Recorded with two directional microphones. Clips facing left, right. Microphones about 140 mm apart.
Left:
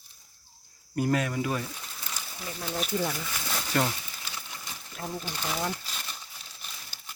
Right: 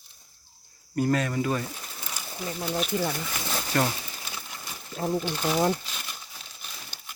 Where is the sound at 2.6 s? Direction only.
5° right (ahead or behind).